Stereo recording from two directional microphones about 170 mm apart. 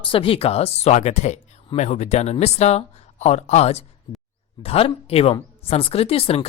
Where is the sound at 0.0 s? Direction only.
30° left (ahead or behind).